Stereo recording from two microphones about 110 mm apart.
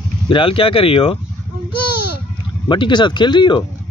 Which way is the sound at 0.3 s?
55° left (ahead or behind).